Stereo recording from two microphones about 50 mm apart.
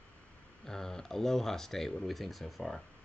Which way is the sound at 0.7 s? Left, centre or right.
Centre.